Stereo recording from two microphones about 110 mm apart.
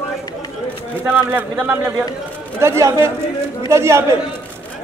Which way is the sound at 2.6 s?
25° right (ahead or behind).